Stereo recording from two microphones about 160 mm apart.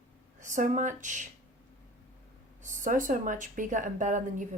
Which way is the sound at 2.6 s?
55° right (ahead or behind).